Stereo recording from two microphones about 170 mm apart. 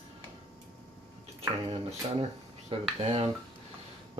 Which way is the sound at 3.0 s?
35° right (ahead or behind).